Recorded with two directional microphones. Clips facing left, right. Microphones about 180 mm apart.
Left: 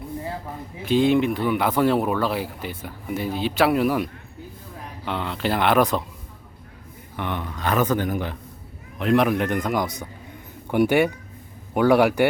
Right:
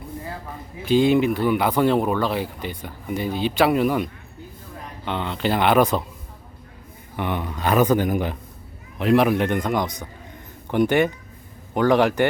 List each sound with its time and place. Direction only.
0.9 s speech: centre (ahead or behind)
7.2 s speech: 10° right (ahead or behind)
9.0 s speech: centre (ahead or behind)